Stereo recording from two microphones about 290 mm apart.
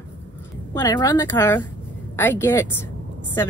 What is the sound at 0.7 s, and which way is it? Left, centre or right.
A woman's voice, centre.